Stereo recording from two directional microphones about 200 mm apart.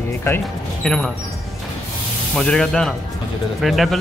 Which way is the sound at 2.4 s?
5° left (ahead or behind).